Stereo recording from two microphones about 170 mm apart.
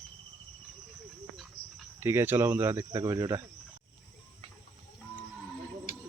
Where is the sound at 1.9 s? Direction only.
15° right (ahead or behind).